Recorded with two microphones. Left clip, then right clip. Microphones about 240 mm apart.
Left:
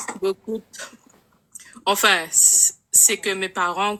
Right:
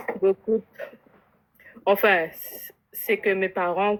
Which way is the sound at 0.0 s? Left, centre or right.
Centre.